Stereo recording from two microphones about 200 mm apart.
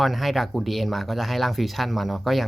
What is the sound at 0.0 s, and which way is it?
Speech, centre (ahead or behind).